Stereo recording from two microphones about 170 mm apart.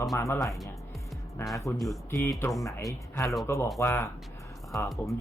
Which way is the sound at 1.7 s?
Centre (ahead or behind).